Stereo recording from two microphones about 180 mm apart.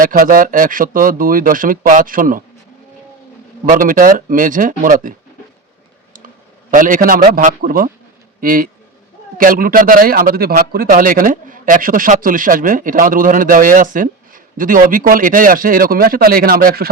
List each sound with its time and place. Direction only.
0.0 s a man's voice: 50° right (ahead or behind)
3.7 s a man's voice: 50° right (ahead or behind)
6.7 s a man's voice: 50° right (ahead or behind)